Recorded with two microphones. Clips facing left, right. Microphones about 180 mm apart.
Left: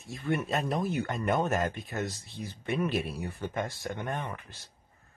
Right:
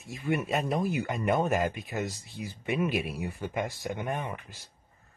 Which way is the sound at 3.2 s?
Centre (ahead or behind).